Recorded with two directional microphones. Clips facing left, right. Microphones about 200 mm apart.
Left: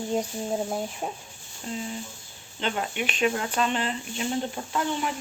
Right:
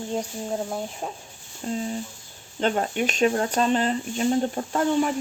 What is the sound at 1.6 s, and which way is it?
Speech, 40° right (ahead or behind).